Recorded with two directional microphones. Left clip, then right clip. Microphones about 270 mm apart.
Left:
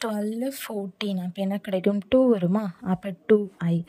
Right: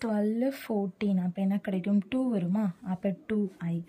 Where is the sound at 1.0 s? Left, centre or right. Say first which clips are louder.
Left 3 dB; left.